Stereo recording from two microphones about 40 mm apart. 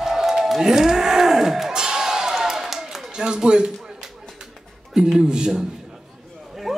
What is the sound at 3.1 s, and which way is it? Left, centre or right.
Speech, right.